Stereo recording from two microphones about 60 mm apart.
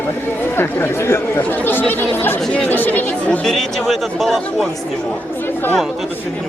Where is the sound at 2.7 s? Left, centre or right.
Left.